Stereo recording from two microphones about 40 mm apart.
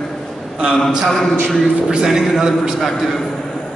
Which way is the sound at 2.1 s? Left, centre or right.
Centre.